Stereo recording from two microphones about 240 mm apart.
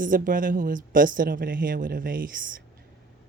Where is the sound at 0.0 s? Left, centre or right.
Right.